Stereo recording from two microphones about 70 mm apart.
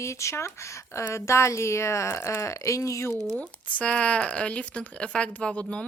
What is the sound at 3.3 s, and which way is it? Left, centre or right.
Speech, centre.